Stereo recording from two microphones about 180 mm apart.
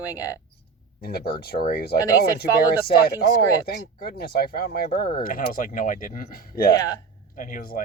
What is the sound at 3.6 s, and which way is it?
Speech, 60° left (ahead or behind).